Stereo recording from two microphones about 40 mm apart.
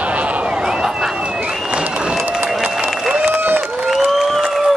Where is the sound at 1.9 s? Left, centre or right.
Right.